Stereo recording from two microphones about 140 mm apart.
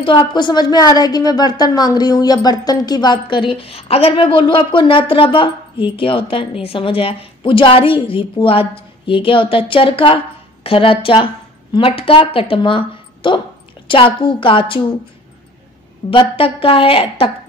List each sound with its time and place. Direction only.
0.0 s a woman's voice: 35° left (ahead or behind)
16.1 s a woman's voice: 40° left (ahead or behind)